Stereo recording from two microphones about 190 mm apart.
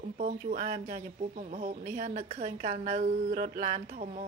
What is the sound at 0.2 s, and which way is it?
A woman's voice, 45° right (ahead or behind).